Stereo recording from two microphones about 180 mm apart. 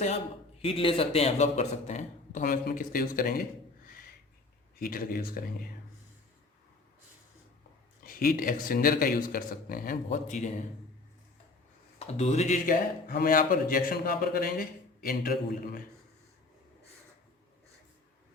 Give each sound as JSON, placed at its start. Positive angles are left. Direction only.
{"t": 0.6, "sound": "a man's voice", "side_deg": 30}
{"t": 4.8, "sound": "a man's voice", "side_deg": 55}
{"t": 8.0, "sound": "a man's voice", "side_deg": 55}
{"t": 11.9, "sound": "a man's voice", "side_deg": 35}